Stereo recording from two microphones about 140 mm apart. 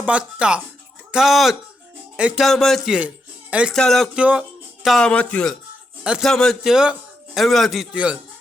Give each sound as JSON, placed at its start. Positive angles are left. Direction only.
{"t": 0.0, "sound": "a man's voice", "side_deg": -10}
{"t": 6.0, "sound": "a man's voice", "side_deg": -5}